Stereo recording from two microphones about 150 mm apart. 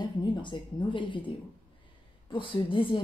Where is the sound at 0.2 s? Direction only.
30° left (ahead or behind).